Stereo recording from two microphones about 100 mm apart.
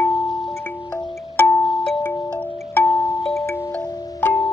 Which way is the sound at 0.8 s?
45° left (ahead or behind).